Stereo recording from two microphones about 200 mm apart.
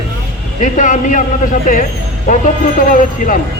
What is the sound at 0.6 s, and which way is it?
A man's voice, 40° left (ahead or behind).